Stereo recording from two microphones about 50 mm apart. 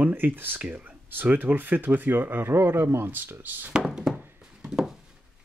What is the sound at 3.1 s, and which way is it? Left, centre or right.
Speech, right.